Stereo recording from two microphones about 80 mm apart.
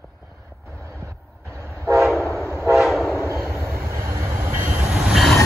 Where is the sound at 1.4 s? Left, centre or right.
Right.